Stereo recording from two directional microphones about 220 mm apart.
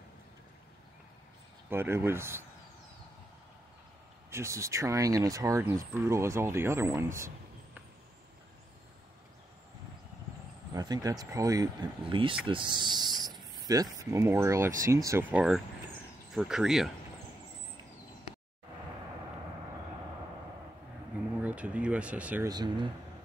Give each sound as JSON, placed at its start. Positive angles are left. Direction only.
{"t": 1.7, "sound": "speech", "side_deg": -10}
{"t": 4.3, "sound": "speech", "side_deg": -15}
{"t": 10.7, "sound": "speech", "side_deg": -15}
{"t": 21.4, "sound": "speech", "side_deg": -5}
{"t": 22.5, "sound": "speech", "side_deg": -20}